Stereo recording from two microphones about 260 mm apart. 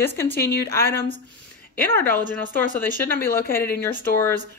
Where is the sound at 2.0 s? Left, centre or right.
Left.